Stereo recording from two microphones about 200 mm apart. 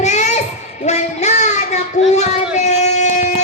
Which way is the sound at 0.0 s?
35° left (ahead or behind).